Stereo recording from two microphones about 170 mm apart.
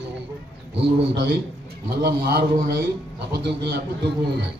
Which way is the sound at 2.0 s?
65° right (ahead or behind).